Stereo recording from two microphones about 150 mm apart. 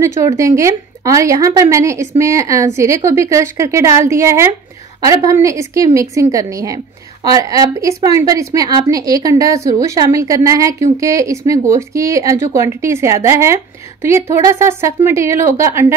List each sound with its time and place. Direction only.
0.2 s a woman's voice: 20° right (ahead or behind)